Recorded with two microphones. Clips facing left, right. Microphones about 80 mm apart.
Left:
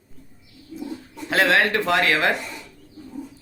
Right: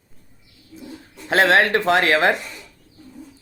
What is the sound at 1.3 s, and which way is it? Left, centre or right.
Speech, right.